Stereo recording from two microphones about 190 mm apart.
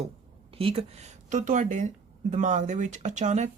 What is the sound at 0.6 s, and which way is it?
Speech, 30° right (ahead or behind).